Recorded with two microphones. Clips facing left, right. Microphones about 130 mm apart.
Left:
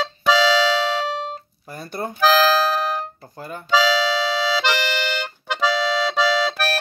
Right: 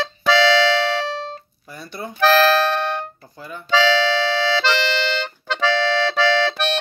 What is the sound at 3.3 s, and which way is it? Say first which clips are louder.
Speech: left 2 dB; 45° left (ahead or behind).